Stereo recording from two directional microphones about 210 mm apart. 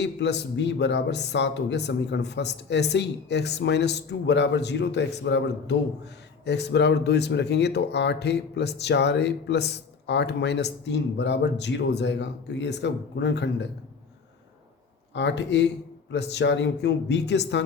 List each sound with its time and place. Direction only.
0.0 s speech: 55° left (ahead or behind)
15.1 s speech: 55° left (ahead or behind)